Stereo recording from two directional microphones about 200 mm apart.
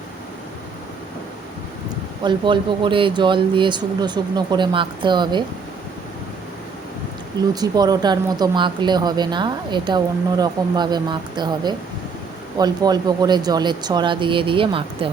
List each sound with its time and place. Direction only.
2.2 s speech: 25° right (ahead or behind)
7.5 s speech: 20° right (ahead or behind)